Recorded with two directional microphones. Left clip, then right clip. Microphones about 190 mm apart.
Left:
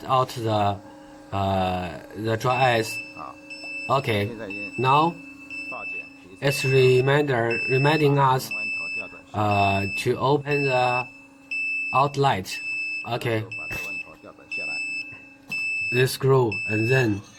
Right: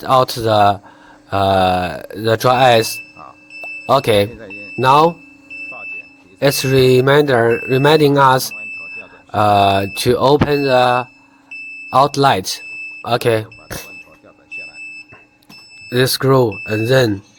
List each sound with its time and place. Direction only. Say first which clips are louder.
0.0 s speech: right 9 dB; 55° right (ahead or behind)
3.8 s speech: right 11 dB; 55° right (ahead or behind)
4.3 s a man's voice: right 1 dB; 10° left (ahead or behind)
4.8 s speech: right 9 dB; 55° right (ahead or behind)
6.4 s speech: right 7 dB; 45° right (ahead or behind)
8.5 s smoke detector: even; 5° left (ahead or behind)
9.3 s speech: right 10 dB; 50° right (ahead or behind)
15.9 s speech: right 9 dB; 50° right (ahead or behind)